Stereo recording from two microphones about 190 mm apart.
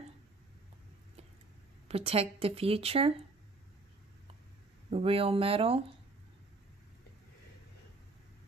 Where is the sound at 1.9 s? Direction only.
30° right (ahead or behind).